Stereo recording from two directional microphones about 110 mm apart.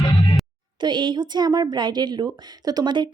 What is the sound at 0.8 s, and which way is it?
A woman's voice, 45° right (ahead or behind).